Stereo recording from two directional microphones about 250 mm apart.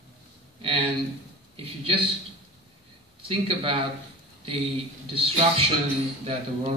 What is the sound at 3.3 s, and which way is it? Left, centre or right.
Speech, right.